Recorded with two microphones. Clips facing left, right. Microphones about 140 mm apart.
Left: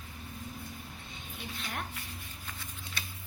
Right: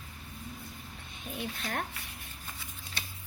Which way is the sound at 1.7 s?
60° right (ahead or behind).